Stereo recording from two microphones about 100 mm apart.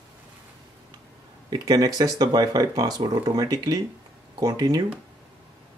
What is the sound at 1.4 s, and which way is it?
Speech, 40° right (ahead or behind).